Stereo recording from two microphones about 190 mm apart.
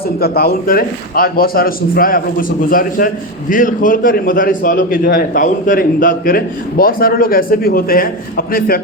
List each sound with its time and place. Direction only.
0.2 s a man's voice: 55° left (ahead or behind)